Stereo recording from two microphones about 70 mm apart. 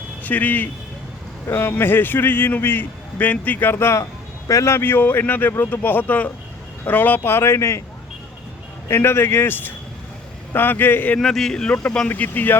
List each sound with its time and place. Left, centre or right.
0.2 s a man's voice: left
7.2 s a man's voice: left
8.9 s a man's voice: left
11.2 s speech: centre; by 12.5 s left